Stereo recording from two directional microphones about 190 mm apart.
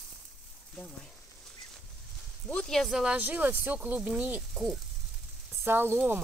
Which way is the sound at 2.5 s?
5° left (ahead or behind).